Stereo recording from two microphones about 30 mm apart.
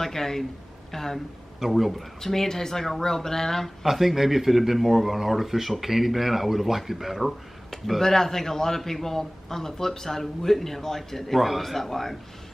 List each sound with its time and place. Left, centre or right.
0.0 s a man's voice: centre
1.7 s speech: centre
2.2 s a man's voice: centre
3.8 s speech: centre
8.0 s a man's voice: centre